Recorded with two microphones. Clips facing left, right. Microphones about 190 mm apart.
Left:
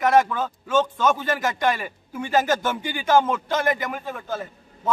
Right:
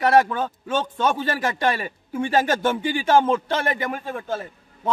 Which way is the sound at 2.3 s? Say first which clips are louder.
Even; 30° right (ahead or behind).